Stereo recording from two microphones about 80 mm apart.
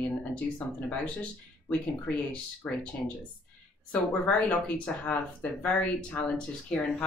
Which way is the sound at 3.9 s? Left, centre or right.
Centre.